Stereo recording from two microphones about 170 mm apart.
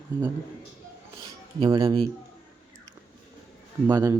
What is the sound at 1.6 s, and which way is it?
Speech, 25° right (ahead or behind).